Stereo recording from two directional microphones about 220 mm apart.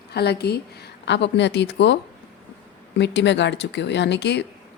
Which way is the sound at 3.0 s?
50° left (ahead or behind).